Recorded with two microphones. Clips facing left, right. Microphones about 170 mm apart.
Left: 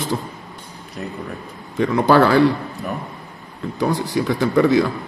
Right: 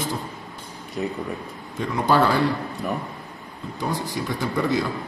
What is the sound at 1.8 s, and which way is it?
Speech, 75° left (ahead or behind).